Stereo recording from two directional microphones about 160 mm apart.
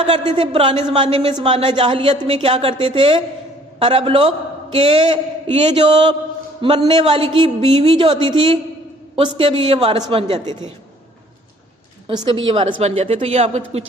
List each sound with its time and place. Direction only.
0.1 s a man's voice: 35° right (ahead or behind)
12.0 s a man's voice: 30° right (ahead or behind)